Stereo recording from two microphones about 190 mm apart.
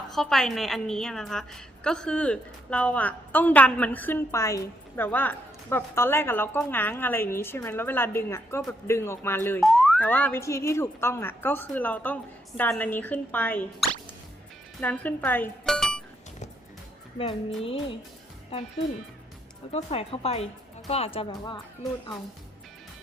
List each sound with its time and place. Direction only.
0.1 s a woman's voice: centre (ahead or behind)
9.6 s a woman's voice: centre (ahead or behind)
17.2 s music: 30° left (ahead or behind)
19.7 s speech: 30° left (ahead or behind)